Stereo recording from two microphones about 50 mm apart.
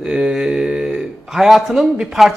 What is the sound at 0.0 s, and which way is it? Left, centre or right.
A man's voice, centre.